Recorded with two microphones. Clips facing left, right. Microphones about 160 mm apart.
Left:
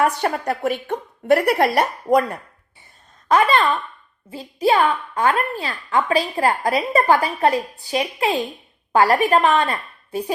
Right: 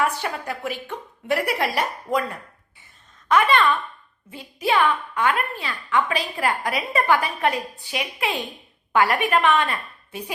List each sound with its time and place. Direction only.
0.0 s a woman's voice: 45° left (ahead or behind)
3.2 s a woman's voice: 35° left (ahead or behind)